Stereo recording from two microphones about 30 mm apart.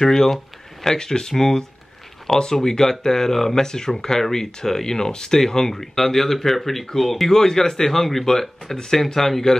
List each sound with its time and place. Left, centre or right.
0.0 s speech: centre
7.3 s speech: centre